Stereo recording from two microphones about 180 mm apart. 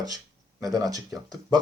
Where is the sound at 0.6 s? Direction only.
20° right (ahead or behind).